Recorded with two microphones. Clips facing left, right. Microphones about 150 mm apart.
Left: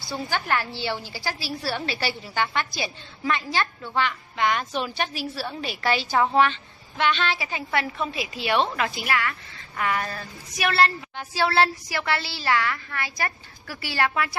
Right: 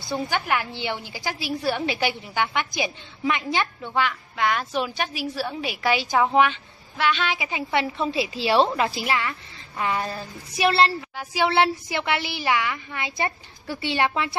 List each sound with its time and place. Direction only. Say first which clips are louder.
0.1 s a woman's voice: right 2 dB; 10° right (ahead or behind)
4.1 s a woman's voice: even; centre (ahead or behind); by 10.9 s 25° right (ahead or behind)
11.1 s a woman's voice: right 1 dB; 15° right (ahead or behind)